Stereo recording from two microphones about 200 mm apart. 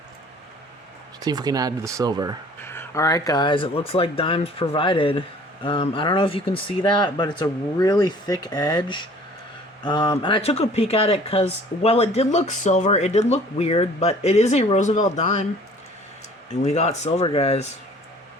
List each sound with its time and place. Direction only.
1.2 s speech: 20° right (ahead or behind)
2.6 s speech: 15° left (ahead or behind); by 15.4 s 35° left (ahead or behind)
16.6 s speech: 35° left (ahead or behind)